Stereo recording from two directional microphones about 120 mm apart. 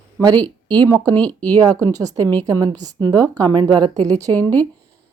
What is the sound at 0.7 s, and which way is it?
A woman's voice, 35° right (ahead or behind).